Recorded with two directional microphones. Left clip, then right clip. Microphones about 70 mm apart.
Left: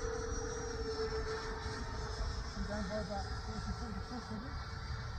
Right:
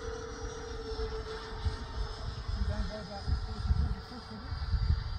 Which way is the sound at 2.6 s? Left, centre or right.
Centre.